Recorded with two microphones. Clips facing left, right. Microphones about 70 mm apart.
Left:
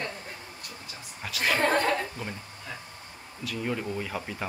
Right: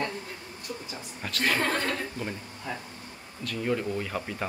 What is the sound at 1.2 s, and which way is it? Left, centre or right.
Speech, centre.